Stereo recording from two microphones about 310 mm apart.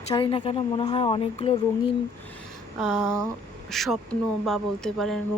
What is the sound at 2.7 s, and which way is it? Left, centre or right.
Speech, centre.